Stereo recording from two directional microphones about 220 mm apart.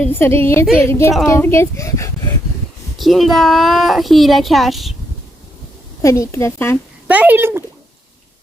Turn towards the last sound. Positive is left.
turn(degrees=-10)  # may be behind; listen again after turning